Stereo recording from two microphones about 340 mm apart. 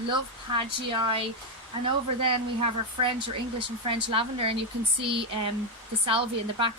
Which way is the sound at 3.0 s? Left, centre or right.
Centre.